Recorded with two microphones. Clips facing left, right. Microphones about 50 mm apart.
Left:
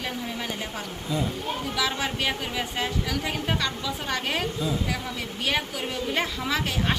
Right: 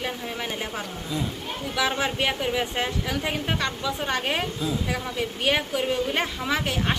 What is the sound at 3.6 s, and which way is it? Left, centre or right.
Speech, right.